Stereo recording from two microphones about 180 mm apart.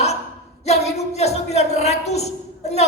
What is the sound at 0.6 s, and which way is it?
Speech, 35° left (ahead or behind).